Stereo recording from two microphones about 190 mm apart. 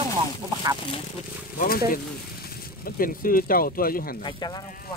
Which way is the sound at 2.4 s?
55° left (ahead or behind).